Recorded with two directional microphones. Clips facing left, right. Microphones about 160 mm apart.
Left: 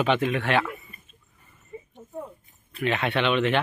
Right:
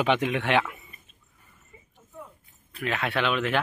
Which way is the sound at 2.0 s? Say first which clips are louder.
Left 7 dB; 45° left (ahead or behind).